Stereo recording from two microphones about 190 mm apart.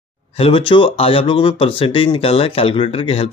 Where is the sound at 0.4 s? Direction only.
25° left (ahead or behind).